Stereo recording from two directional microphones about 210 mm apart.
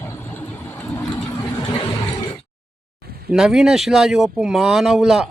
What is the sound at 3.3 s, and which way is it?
A man's voice, centre (ahead or behind).